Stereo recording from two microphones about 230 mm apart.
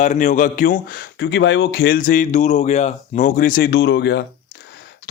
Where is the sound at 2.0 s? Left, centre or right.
Left.